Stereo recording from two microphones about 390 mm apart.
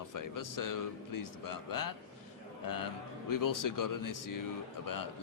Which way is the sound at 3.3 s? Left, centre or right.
Left.